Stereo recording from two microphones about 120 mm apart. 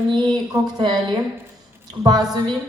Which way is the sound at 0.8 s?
40° right (ahead or behind).